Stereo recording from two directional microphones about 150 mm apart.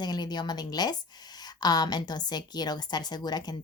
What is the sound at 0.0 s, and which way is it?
A woman's voice, 30° left (ahead or behind).